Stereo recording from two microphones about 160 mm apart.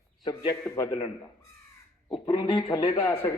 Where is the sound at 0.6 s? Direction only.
20° left (ahead or behind).